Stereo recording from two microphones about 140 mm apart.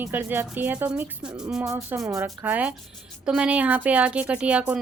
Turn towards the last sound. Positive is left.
turn(degrees=-10)  # may be behind; listen again after turning